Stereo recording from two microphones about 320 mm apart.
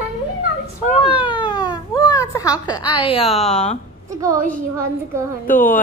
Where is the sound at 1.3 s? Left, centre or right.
Centre.